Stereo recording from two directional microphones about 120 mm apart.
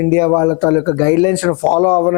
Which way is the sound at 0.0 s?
25° left (ahead or behind).